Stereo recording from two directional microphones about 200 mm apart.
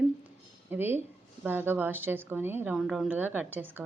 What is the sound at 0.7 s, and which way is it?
A woman's voice, 10° right (ahead or behind).